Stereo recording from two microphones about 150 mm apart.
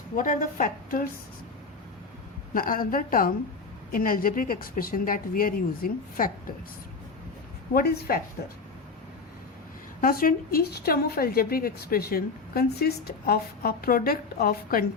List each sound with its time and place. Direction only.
0.2 s a woman's voice: 65° left (ahead or behind)
2.5 s speech: 70° left (ahead or behind)
7.7 s a woman's voice: 85° left
10.0 s a woman's voice: 70° left (ahead or behind)